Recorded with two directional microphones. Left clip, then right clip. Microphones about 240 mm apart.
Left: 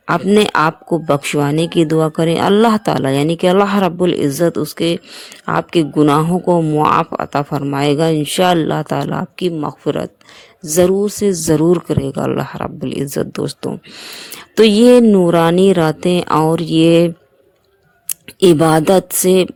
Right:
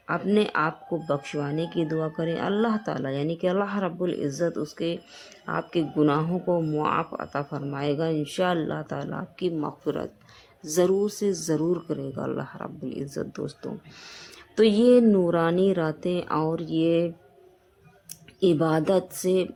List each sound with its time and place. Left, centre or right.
0.1 s speech: left
18.1 s speech: left